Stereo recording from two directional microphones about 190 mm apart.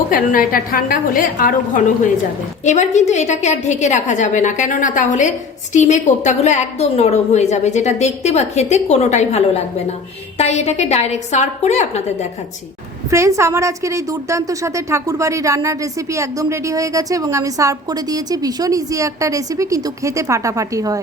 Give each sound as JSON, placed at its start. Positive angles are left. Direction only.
{"t": 0.1, "sound": "a woman's voice", "side_deg": 45}
{"t": 13.1, "sound": "a woman's voice", "side_deg": -15}